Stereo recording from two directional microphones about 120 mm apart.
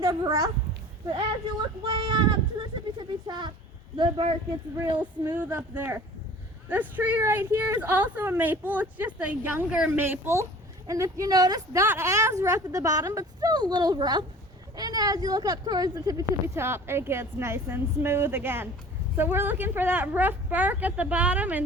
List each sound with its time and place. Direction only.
0.0 s speech: 30° right (ahead or behind)
1.8 s speech: 40° right (ahead or behind)
4.9 s a woman's voice: 15° right (ahead or behind)